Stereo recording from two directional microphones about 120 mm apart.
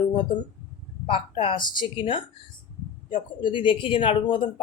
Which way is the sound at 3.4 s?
45° left (ahead or behind).